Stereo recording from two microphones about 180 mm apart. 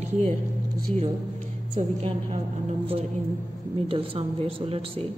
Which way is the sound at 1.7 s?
35° right (ahead or behind).